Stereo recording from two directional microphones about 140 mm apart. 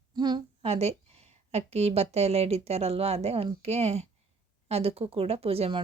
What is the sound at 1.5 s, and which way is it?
Speech, 45° right (ahead or behind).